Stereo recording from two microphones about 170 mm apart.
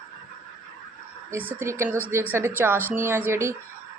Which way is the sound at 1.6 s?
15° right (ahead or behind).